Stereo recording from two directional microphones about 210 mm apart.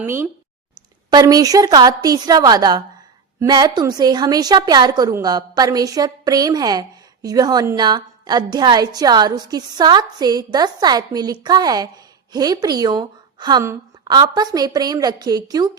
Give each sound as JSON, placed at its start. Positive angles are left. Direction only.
{"t": 0.0, "sound": "a woman's voice", "side_deg": -10}